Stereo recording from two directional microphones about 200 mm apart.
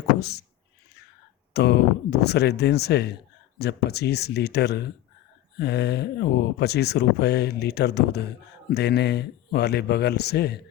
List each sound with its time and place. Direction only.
0.2 s speech: 55° left (ahead or behind)
1.5 s speech: 55° left (ahead or behind)